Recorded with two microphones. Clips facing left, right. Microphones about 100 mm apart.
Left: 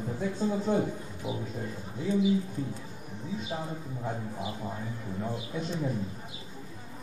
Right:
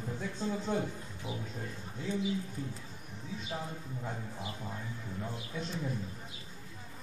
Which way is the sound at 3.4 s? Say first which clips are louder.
Left 4 dB; 15° left (ahead or behind).